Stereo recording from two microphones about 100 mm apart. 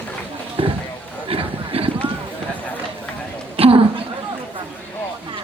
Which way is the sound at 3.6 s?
70° right (ahead or behind).